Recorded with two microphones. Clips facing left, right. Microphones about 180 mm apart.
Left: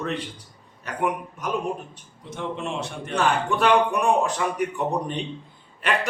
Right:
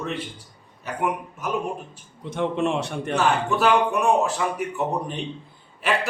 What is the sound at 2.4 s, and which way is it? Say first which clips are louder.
Speech: right 6 dB; 65° right (ahead or behind).